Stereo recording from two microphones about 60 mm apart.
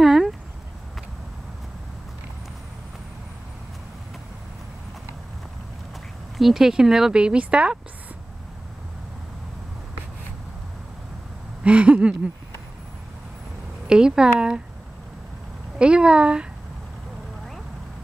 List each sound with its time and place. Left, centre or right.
0.0 s a sound: centre
6.3 s speech: centre
11.6 s speech: centre
13.8 s speech: centre
15.8 s speech: centre